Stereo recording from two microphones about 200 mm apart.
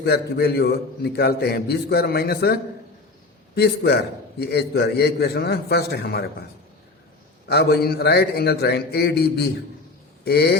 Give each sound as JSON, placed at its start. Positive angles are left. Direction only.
{"t": 0.0, "sound": "a man's voice", "side_deg": 55}
{"t": 7.4, "sound": "a man's voice", "side_deg": 50}